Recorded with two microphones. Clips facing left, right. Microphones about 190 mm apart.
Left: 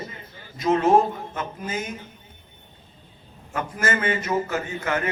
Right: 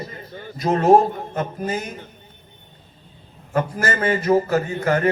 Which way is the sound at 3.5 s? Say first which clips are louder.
Right 4 dB; 35° right (ahead or behind).